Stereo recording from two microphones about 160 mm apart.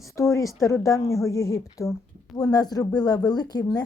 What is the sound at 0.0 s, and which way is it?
Speech, 20° left (ahead or behind).